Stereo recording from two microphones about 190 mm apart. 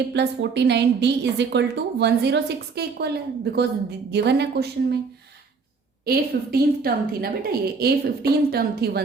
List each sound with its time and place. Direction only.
0.1 s a woman's voice: 65° right (ahead or behind)
6.1 s a woman's voice: 50° right (ahead or behind)